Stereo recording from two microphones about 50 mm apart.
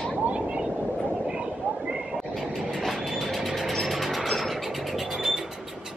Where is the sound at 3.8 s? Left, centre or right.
Centre.